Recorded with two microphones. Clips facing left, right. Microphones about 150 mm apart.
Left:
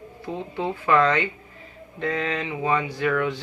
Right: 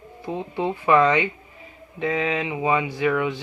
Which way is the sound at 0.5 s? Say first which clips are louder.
Right 2 dB; 15° right (ahead or behind).